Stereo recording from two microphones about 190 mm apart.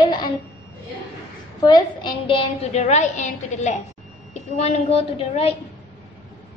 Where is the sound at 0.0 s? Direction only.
25° left (ahead or behind).